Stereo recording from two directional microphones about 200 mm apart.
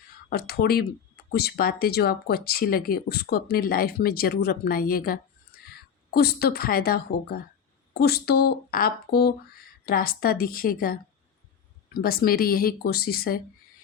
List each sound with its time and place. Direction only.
0.3 s speech: 50° left (ahead or behind)
12.0 s speech: 50° left (ahead or behind)